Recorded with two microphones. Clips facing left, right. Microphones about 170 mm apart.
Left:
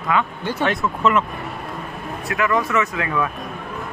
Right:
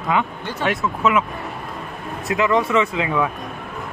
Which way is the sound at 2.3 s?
20° right (ahead or behind).